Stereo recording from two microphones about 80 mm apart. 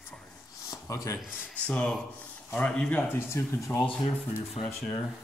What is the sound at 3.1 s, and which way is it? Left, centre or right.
Speech, left.